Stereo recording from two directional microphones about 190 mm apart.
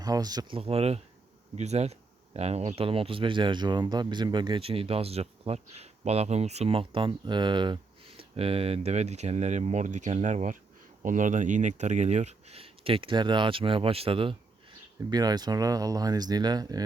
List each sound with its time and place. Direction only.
0.0 s speech: 20° right (ahead or behind)
0.6 s speech: 30° right (ahead or behind)